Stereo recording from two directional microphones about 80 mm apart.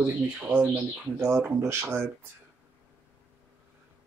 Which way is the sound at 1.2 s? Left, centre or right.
Right.